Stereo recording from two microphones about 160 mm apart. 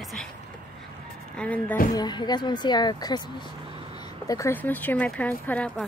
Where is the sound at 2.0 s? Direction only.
25° left (ahead or behind).